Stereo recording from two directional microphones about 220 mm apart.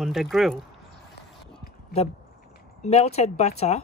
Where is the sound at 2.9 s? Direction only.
30° left (ahead or behind).